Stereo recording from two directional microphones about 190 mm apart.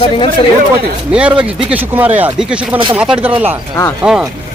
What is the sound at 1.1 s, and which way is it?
Speech, 5° right (ahead or behind).